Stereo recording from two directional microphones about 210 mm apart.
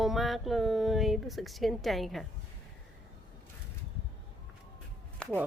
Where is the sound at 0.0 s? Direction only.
Centre (ahead or behind).